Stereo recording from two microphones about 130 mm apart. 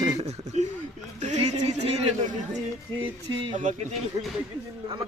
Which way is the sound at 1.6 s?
55° right (ahead or behind).